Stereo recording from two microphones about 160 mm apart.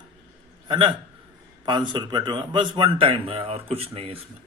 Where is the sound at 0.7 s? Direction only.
30° right (ahead or behind).